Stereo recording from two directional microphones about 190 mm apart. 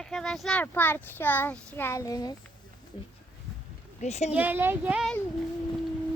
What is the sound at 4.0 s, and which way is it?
Speech, 35° left (ahead or behind).